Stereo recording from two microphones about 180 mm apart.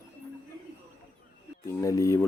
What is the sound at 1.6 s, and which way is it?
Speech, 15° left (ahead or behind).